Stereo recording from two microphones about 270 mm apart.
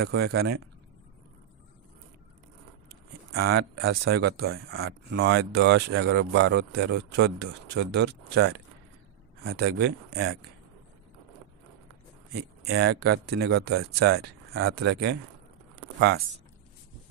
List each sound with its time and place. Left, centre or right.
0.2 s speech: right
3.3 s speech: right
4.8 s speech: right
12.6 s speech: right